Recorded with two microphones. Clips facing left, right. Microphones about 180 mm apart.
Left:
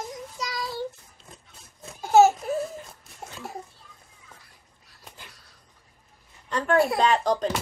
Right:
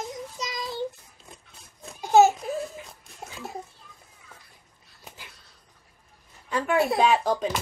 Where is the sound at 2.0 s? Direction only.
15° right (ahead or behind).